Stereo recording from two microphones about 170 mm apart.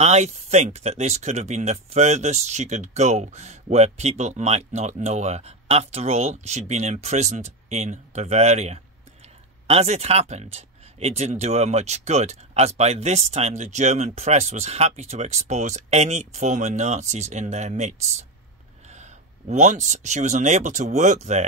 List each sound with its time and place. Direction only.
0.0 s speech: 40° right (ahead or behind)